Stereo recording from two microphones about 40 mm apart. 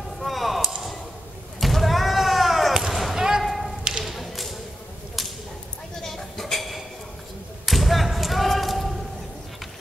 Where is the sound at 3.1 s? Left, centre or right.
Centre.